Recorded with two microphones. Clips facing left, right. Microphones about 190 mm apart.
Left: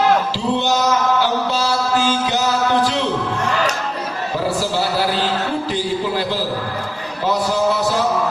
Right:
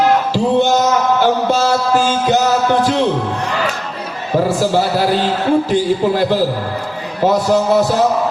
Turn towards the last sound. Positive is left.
turn(degrees=-50)  # may be behind; listen again after turning